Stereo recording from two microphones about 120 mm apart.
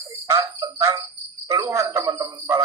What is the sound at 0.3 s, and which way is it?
Speech, 30° right (ahead or behind).